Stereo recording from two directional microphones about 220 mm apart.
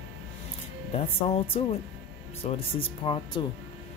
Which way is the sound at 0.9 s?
25° left (ahead or behind).